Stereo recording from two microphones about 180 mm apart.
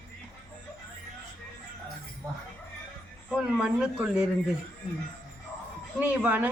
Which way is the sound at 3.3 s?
5° right (ahead or behind).